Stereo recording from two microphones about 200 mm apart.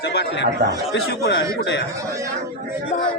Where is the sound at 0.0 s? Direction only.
55° left (ahead or behind).